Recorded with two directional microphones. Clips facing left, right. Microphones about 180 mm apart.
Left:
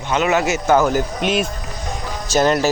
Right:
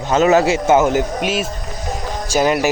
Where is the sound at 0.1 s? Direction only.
35° right (ahead or behind); by 1.0 s 20° right (ahead or behind).